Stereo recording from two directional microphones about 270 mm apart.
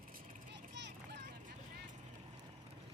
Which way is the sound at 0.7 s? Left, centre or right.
Right.